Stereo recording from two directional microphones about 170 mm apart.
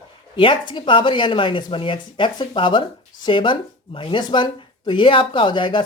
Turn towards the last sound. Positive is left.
turn(degrees=30)  # may be behind; listen again after turning